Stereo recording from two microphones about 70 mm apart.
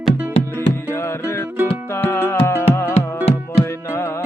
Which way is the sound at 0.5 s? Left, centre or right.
Left.